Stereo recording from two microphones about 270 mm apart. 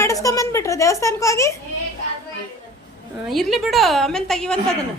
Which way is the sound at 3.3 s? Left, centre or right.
Centre.